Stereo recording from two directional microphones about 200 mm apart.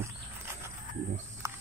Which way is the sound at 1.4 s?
15° right (ahead or behind).